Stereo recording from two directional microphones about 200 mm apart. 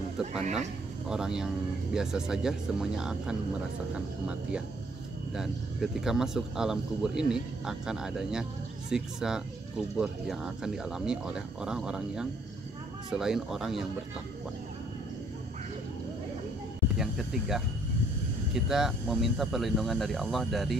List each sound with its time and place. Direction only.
0.3 s speech: 35° right (ahead or behind)
1.0 s speech: 5° right (ahead or behind)
17.0 s speech: centre (ahead or behind)